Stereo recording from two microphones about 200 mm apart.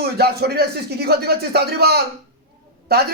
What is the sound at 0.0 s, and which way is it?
Speech, 55° right (ahead or behind).